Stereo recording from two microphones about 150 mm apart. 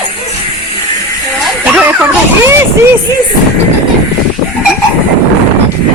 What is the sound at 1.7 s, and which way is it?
Vehicle, 10° right (ahead or behind).